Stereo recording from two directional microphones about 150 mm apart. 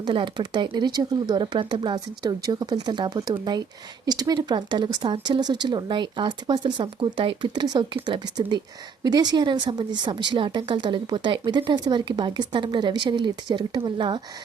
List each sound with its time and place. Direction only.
0.0 s a woman's voice: 30° right (ahead or behind)